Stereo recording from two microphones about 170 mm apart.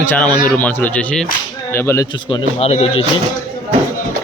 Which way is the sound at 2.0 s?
25° left (ahead or behind).